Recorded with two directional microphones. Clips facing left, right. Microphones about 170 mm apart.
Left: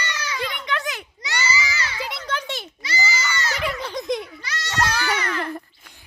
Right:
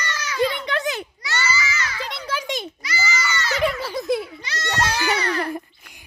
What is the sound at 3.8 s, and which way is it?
Giggle, 5° right (ahead or behind).